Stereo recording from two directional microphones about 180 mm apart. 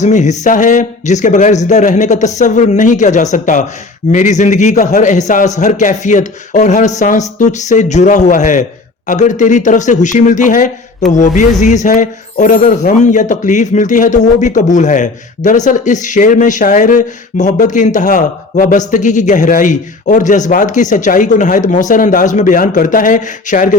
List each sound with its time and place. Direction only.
0.0 s a man's voice: 40° left (ahead or behind)